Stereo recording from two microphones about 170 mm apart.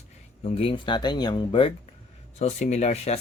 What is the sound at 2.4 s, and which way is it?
Speech, 40° left (ahead or behind).